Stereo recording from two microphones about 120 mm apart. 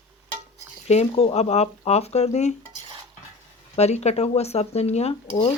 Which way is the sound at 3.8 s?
65° left (ahead or behind).